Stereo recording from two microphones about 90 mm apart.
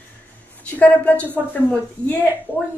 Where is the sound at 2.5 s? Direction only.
20° left (ahead or behind).